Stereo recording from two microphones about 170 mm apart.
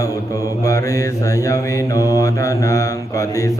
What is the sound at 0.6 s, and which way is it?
Mantra, 20° left (ahead or behind).